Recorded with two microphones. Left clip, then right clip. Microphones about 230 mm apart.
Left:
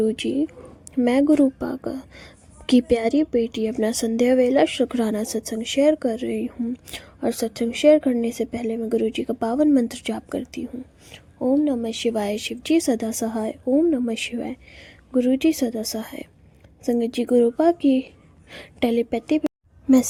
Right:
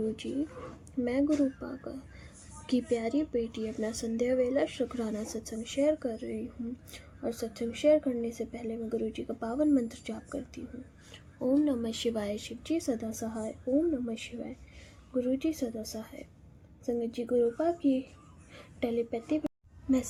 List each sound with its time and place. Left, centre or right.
0.2 s speech: left
11.1 s a woman's voice: left